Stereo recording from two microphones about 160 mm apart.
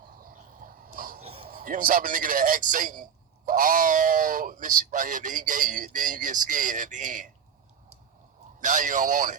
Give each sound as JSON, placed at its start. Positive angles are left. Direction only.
{"t": 0.2, "sound": "a sound", "side_deg": -60}
{"t": 1.2, "sound": "basketball bounce", "side_deg": -35}
{"t": 1.5, "sound": "a man's voice", "side_deg": -60}
{"t": 8.6, "sound": "speech", "side_deg": -50}